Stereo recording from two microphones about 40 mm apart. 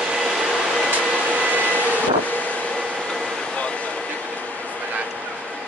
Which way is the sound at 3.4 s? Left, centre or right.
Left.